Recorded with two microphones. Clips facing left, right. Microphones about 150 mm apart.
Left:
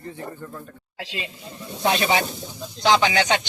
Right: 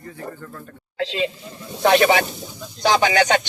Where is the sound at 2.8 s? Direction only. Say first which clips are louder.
Right 2 dB; 45° right (ahead or behind).